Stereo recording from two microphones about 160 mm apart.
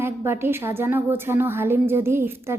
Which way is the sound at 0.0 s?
15° right (ahead or behind).